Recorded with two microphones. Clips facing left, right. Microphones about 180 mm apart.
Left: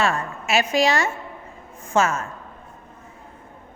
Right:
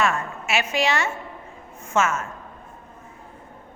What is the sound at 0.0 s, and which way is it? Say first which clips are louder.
A woman's voice: left 1 dB; 35° left (ahead or behind).